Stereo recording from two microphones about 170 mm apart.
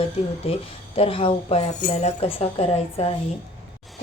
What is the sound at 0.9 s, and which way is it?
A woman's voice, 35° left (ahead or behind).